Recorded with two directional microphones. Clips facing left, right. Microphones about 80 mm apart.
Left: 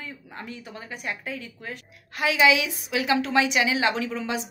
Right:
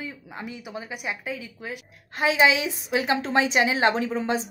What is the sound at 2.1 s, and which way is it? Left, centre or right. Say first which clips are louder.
A woman's voice: even; right.